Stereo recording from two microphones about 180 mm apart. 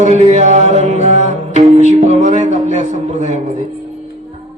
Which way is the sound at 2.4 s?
40° right (ahead or behind).